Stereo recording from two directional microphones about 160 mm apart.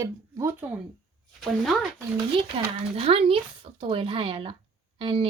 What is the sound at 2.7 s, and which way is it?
Speech, 40° right (ahead or behind).